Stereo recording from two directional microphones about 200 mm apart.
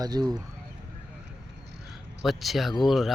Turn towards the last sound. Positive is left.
turn(degrees=0)  # may be behind; listen again after turning